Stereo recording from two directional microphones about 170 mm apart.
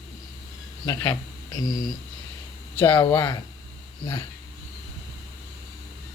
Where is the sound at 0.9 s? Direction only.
15° left (ahead or behind).